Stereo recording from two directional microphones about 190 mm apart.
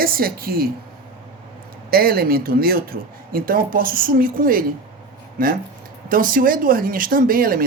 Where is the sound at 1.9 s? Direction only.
50° right (ahead or behind).